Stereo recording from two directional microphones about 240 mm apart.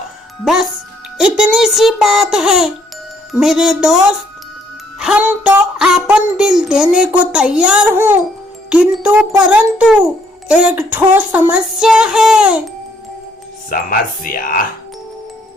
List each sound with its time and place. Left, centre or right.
0.4 s speech: centre
13.7 s speech: left